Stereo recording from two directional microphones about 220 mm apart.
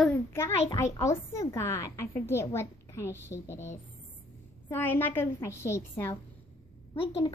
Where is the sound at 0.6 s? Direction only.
20° left (ahead or behind).